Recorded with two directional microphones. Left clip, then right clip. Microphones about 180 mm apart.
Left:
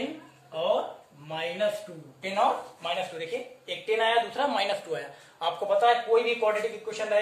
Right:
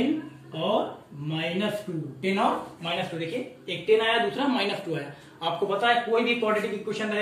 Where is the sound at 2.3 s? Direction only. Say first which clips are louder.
Left 1 dB; 40° left (ahead or behind).